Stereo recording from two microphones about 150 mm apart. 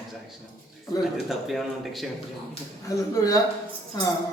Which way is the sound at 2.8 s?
20° left (ahead or behind).